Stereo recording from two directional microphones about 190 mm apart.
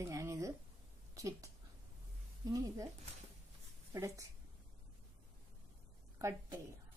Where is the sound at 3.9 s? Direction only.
15° right (ahead or behind).